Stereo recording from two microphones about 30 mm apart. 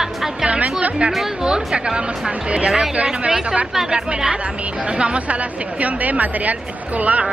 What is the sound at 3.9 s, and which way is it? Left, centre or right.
Speech, right.